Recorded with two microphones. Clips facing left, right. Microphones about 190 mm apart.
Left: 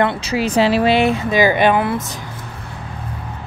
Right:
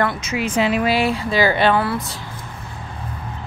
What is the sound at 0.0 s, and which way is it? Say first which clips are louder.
Speech: left 4 dB; 30° left (ahead or behind).